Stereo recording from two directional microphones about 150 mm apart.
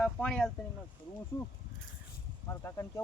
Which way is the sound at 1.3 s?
25° left (ahead or behind).